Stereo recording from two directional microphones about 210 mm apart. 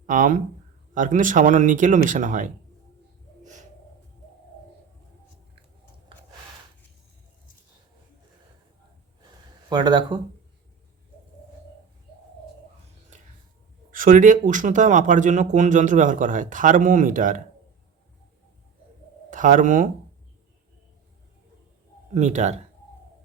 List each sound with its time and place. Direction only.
0.0 s speech: 40° right (ahead or behind)
3.4 s a sound: 35° right (ahead or behind)
9.6 s speech: 20° right (ahead or behind)
13.9 s speech: 40° right (ahead or behind)
19.3 s speech: 40° right (ahead or behind)
22.1 s speech: 35° right (ahead or behind)